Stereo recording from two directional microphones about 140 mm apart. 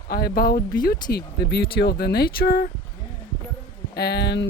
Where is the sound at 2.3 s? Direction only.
90° left.